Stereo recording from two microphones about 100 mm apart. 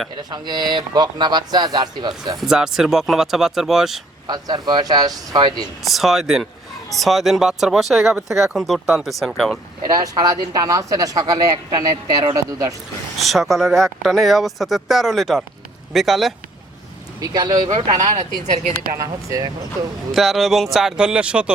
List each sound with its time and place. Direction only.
0.2 s speech: 45° right (ahead or behind)
2.4 s speech: 5° right (ahead or behind)
4.3 s speech: 45° right (ahead or behind)
5.8 s speech: centre (ahead or behind)
9.8 s speech: 40° right (ahead or behind)
13.1 s speech: centre (ahead or behind)
17.2 s speech: 40° right (ahead or behind)
20.1 s speech: centre (ahead or behind)